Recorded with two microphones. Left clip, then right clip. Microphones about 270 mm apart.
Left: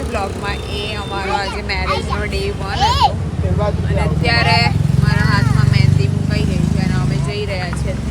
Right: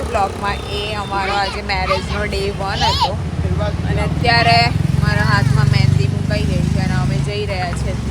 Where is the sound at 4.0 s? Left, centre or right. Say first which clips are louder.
Right 2 dB; centre.